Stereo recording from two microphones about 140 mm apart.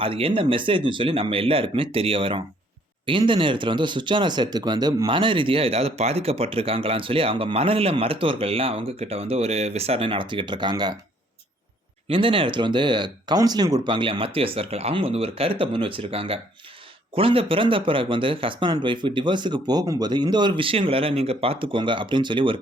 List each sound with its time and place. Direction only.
0.0 s speech: 40° right (ahead or behind)
12.0 s speech: 40° right (ahead or behind)